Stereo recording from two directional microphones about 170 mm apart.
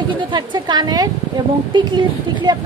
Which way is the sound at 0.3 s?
25° right (ahead or behind).